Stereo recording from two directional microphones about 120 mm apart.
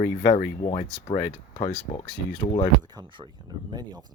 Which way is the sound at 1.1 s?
40° left (ahead or behind).